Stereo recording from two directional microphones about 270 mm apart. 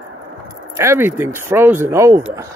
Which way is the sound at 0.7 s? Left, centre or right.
Centre.